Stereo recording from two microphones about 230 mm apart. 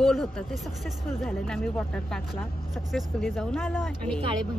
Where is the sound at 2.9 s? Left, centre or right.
Centre.